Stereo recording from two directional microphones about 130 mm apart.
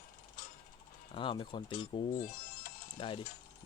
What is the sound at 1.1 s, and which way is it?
Speech, 40° left (ahead or behind).